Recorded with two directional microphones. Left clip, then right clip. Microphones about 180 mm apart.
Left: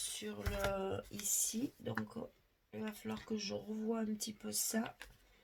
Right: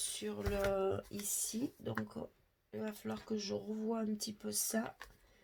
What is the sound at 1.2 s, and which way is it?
Speech, 35° right (ahead or behind).